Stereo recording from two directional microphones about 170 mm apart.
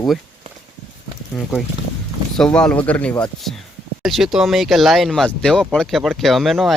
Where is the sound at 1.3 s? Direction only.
5° left (ahead or behind).